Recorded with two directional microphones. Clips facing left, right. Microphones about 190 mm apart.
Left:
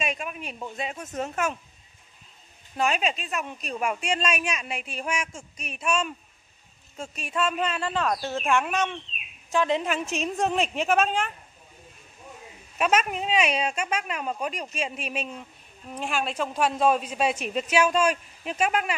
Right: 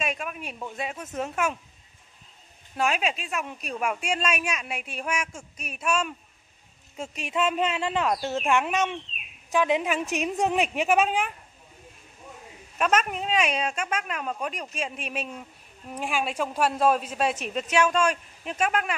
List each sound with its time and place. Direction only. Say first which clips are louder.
0.0 s a sound: even; centre (ahead or behind)
0.7 s a man's voice: even; 5° right (ahead or behind)
2.8 s a man's voice: left 1 dB; 5° right (ahead or behind)
7.0 s speech: right 1 dB; 20° right (ahead or behind)
12.7 s a man's voice: left 1 dB; 5° left (ahead or behind)